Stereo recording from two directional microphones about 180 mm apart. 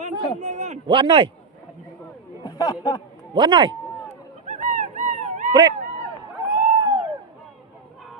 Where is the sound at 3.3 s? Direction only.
25° right (ahead or behind).